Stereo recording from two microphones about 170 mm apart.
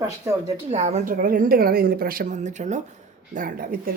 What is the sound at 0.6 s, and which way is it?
A woman's voice, 40° right (ahead or behind).